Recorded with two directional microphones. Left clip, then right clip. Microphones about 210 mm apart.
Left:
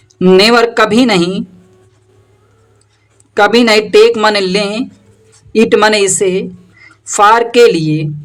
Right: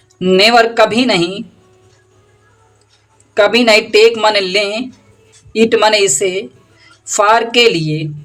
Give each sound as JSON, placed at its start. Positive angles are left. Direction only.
{"t": 0.2, "sound": "a woman's voice", "side_deg": 30}
{"t": 3.3, "sound": "a woman's voice", "side_deg": 25}